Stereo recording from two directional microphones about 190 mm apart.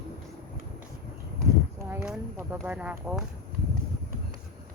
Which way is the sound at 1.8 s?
10° right (ahead or behind).